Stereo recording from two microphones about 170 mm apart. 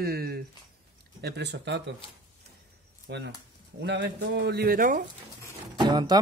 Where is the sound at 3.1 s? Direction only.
75° right (ahead or behind).